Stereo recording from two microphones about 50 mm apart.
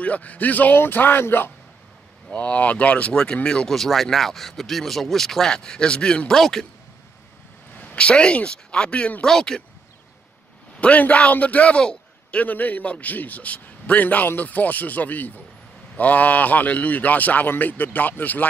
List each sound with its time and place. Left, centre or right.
0.0 s a man's voice: left
2.3 s speech: left
3.7 s speech: centre
6.3 s speech: centre
7.7 s speech: left; by 9.6 s centre
10.8 s a man's voice: left
12.4 s a man's voice: left